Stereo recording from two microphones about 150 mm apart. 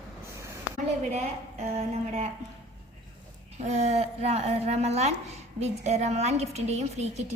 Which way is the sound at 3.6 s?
50° right (ahead or behind).